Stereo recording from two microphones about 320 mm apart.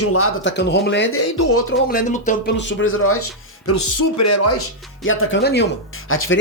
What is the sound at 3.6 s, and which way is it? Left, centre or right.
Speech, left.